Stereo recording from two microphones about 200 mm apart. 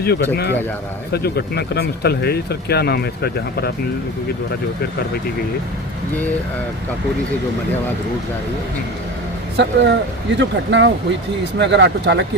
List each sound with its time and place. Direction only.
1.1 s speech: 55° left (ahead or behind)
9.6 s speech: 60° right (ahead or behind)